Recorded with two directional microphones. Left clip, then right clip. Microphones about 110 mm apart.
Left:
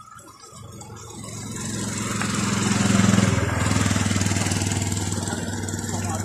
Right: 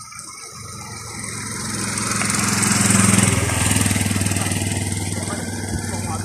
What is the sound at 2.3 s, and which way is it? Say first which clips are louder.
Lawn mower: right 5 dB; 55° right (ahead or behind).